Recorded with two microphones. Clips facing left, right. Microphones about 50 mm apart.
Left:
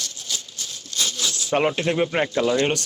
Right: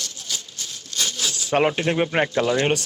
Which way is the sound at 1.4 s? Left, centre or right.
Right.